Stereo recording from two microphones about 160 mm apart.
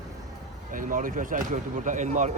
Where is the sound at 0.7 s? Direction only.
55° right (ahead or behind).